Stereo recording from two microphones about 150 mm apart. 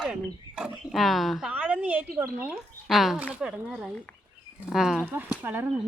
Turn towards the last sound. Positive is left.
turn(degrees=-15)  # may be behind; listen again after turning